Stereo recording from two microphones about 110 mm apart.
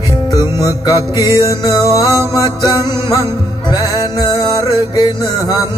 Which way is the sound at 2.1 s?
25° right (ahead or behind).